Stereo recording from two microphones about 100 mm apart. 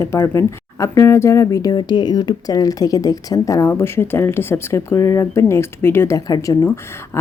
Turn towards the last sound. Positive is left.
turn(degrees=40)  # may be behind; listen again after turning